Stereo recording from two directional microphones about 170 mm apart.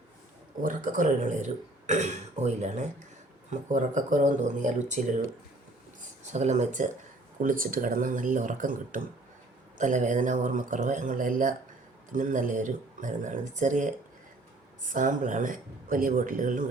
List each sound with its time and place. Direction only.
0.6 s speech: 50° right (ahead or behind)
6.3 s speech: 40° right (ahead or behind)